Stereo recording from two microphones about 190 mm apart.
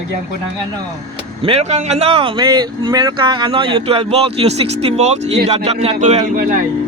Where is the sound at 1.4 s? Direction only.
30° right (ahead or behind).